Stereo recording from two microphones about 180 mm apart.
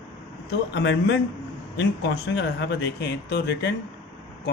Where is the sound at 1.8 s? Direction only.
75° left (ahead or behind).